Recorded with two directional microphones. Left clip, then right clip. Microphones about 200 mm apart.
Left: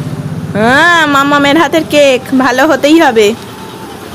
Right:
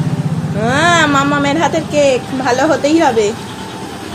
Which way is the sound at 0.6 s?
45° left (ahead or behind).